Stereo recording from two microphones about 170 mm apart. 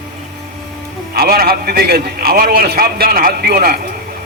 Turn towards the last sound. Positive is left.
turn(degrees=-60)  # may be behind; listen again after turning